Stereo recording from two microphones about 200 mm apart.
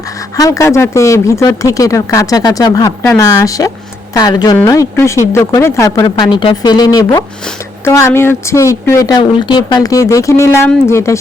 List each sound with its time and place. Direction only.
0.3 s speech: 15° left (ahead or behind)